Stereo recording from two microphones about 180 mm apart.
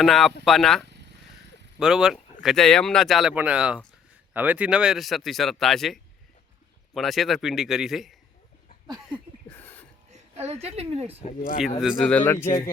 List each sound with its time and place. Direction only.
0.0 s speech: centre (ahead or behind)
9.6 s a sound: 10° left (ahead or behind)
10.1 s a woman's voice: 35° right (ahead or behind)
11.8 s speech: centre (ahead or behind)